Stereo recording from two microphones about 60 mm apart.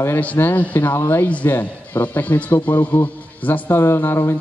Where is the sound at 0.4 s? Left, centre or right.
Left.